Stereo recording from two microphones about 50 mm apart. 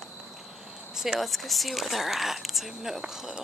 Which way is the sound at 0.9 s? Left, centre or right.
Centre.